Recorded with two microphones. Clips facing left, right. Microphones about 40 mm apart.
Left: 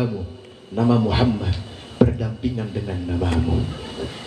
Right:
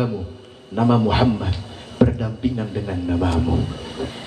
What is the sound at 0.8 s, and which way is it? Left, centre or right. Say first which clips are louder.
Speech: right 1 dB; right.